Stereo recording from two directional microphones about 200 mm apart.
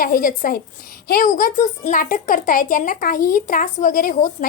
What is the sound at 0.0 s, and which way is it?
A woman's voice, 45° left (ahead or behind).